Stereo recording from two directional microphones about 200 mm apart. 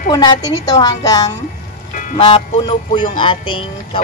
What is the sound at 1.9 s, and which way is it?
Music, 40° left (ahead or behind).